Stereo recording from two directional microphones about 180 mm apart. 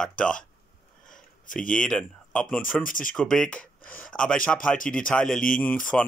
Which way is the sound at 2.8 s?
50° left (ahead or behind).